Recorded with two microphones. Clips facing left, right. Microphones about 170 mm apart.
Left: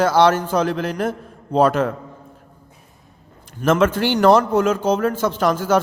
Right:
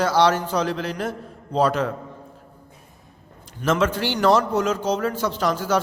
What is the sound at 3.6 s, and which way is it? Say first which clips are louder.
A man's voice: left 5 dB; 50° left (ahead or behind).